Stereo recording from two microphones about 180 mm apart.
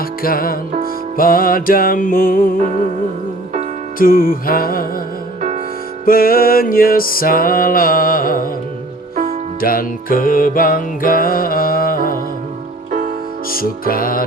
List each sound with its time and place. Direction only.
0.0 s music: 55° left (ahead or behind)
3.9 s music: 50° left (ahead or behind)
6.1 s music: 55° left (ahead or behind)
9.6 s music: 55° left (ahead or behind)
13.5 s music: 55° left (ahead or behind)